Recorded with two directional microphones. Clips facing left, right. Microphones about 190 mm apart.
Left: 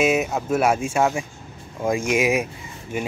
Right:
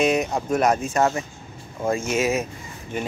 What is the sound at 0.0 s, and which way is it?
Speech, 5° left (ahead or behind).